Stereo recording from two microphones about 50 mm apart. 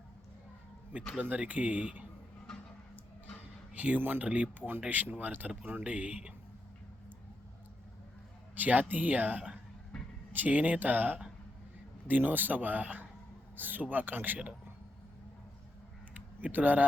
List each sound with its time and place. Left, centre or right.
1.2 s speech: right
3.8 s a man's voice: right
8.5 s a man's voice: right
9.9 s a sound: centre
10.3 s a man's voice: right
16.1 s typing: right